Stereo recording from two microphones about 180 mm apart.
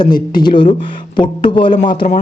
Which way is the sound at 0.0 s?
25° left (ahead or behind).